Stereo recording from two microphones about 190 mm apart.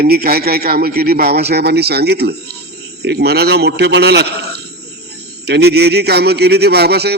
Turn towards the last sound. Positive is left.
turn(degrees=-60)  # may be behind; listen again after turning